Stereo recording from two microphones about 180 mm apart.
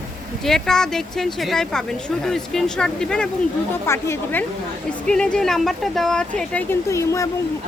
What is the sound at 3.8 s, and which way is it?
Speech, 15° left (ahead or behind).